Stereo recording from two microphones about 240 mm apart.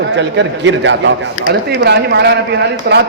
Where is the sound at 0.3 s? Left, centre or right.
Right.